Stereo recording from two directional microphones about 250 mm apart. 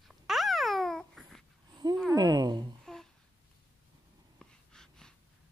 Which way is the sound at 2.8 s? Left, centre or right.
Centre.